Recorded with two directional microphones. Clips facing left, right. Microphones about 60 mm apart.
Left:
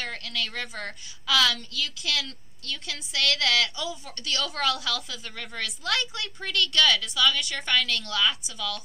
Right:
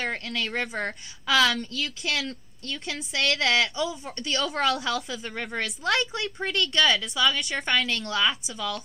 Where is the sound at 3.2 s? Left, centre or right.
Centre.